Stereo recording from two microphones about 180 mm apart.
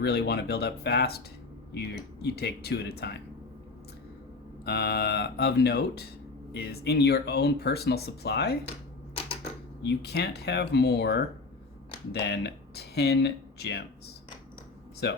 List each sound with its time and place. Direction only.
0.0 s speech: 65° left (ahead or behind)
4.6 s speech: 65° left (ahead or behind)
9.8 s speech: 65° left (ahead or behind)
15.0 s speech: 65° left (ahead or behind)